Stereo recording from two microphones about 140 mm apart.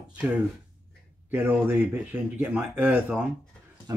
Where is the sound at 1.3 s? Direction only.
15° right (ahead or behind).